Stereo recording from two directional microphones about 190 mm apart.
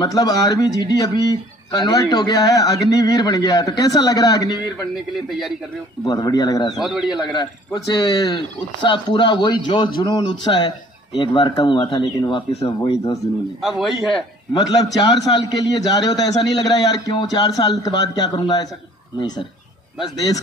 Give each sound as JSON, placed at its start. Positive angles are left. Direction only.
{"t": 0.0, "sound": "speech", "side_deg": 20}
{"t": 6.0, "sound": "speech", "side_deg": 20}
{"t": 6.7, "sound": "a man's voice", "side_deg": 0}
{"t": 7.9, "sound": "speech", "side_deg": 20}
{"t": 13.6, "sound": "a man's voice", "side_deg": 0}
{"t": 14.5, "sound": "speech", "side_deg": 20}